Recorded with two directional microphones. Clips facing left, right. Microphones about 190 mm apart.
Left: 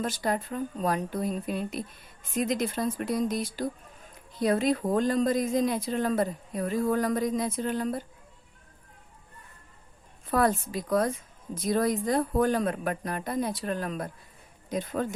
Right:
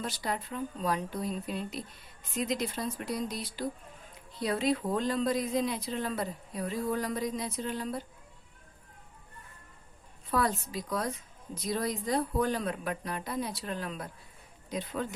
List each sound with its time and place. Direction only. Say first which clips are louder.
0.0 s speech: left 6 dB; 50° left (ahead or behind)
10.3 s speech: left 5 dB; 50° left (ahead or behind)